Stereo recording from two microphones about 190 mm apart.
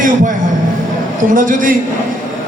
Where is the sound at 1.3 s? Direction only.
45° right (ahead or behind).